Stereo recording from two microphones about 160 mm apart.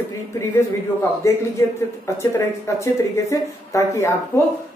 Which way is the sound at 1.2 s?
20° left (ahead or behind).